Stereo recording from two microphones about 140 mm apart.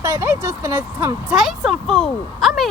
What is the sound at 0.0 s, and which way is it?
Speech, 20° right (ahead or behind).